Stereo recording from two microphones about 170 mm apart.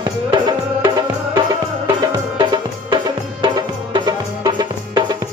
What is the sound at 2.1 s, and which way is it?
Music, 25° right (ahead or behind).